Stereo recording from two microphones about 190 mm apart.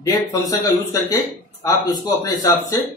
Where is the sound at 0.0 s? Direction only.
20° left (ahead or behind).